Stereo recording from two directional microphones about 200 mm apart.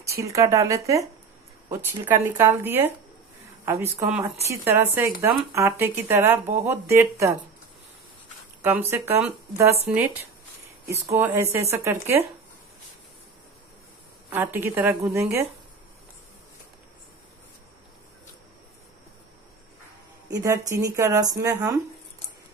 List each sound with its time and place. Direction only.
0.0 s speech: 15° right (ahead or behind)
8.6 s speech: 10° right (ahead or behind)
14.3 s speech: 10° right (ahead or behind)
20.2 s speech: 15° right (ahead or behind)